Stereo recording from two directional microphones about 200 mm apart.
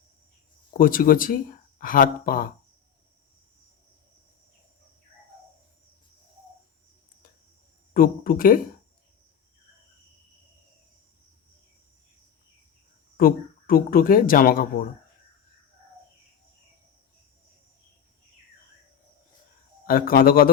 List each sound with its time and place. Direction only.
0.7 s speech: 45° left (ahead or behind)
7.9 s speech: 45° left (ahead or behind)
13.1 s speech: 45° left (ahead or behind)
19.9 s speech: 45° left (ahead or behind)